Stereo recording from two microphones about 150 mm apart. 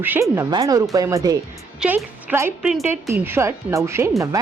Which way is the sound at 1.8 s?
10° right (ahead or behind).